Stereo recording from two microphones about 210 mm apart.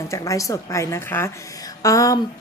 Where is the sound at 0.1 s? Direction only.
15° left (ahead or behind).